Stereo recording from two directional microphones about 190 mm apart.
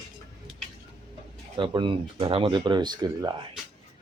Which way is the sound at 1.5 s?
25° right (ahead or behind).